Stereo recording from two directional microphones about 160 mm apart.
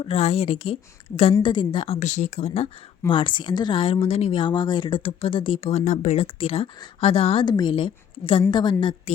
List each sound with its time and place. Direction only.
0.0 s speech: 40° left (ahead or behind)
2.0 s speech: 50° left (ahead or behind)
5.8 s speech: 50° left (ahead or behind)
6.2 s speech: 35° left (ahead or behind)